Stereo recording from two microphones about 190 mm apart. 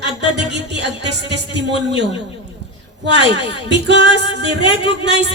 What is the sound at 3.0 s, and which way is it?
Speech, 65° right (ahead or behind).